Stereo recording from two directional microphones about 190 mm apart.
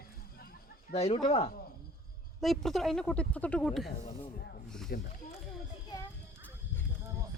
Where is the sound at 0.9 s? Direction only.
35° left (ahead or behind).